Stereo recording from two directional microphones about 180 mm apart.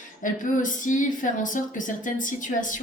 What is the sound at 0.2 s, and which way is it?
Speech, 45° left (ahead or behind).